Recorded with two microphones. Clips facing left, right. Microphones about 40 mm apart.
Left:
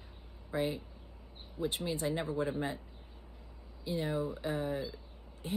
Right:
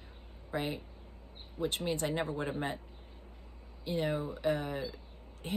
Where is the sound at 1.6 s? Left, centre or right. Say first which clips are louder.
Right 1 dB; right.